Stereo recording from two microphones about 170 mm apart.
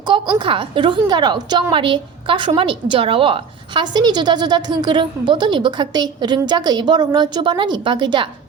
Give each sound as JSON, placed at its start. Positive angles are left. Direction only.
{"t": 0.1, "sound": "a woman's voice", "side_deg": -30}